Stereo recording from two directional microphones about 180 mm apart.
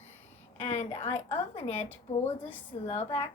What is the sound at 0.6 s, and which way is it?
A woman's voice, 40° left (ahead or behind).